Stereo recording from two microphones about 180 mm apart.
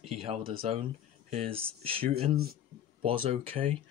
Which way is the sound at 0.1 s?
30° right (ahead or behind).